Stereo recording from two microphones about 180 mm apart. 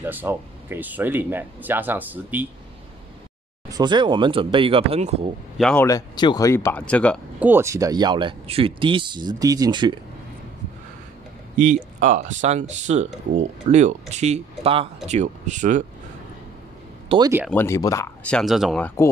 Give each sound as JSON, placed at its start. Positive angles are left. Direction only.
{"t": 0.0, "sound": "speech", "side_deg": -10}
{"t": 3.7, "sound": "speech", "side_deg": -25}
{"t": 5.6, "sound": "speech", "side_deg": 5}
{"t": 5.9, "sound": "speech", "side_deg": 20}
{"t": 7.3, "sound": "speech", "side_deg": -10}
{"t": 11.5, "sound": "speech", "side_deg": -45}
{"t": 17.1, "sound": "speech", "side_deg": -30}
{"t": 17.5, "sound": "speech", "side_deg": 15}